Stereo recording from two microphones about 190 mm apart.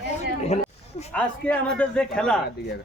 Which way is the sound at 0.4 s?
35° left (ahead or behind).